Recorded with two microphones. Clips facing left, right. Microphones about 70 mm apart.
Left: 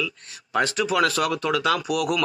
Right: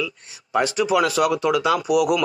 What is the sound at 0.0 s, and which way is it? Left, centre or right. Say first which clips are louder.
A man's voice: right 2 dB; centre.